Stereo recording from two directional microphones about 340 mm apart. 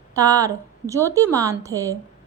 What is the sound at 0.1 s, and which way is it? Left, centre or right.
A woman's voice, centre.